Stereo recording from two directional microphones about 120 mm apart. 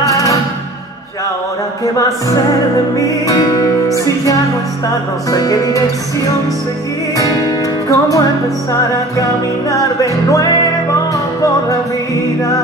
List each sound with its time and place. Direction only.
0.0 s music: 30° left (ahead or behind)
2.0 s music: 30° left (ahead or behind)
7.2 s music: 30° left (ahead or behind)